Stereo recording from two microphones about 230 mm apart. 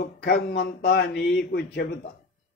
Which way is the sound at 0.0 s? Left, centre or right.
Left.